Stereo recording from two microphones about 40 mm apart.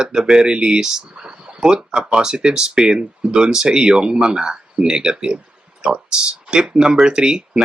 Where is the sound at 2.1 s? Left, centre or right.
Right.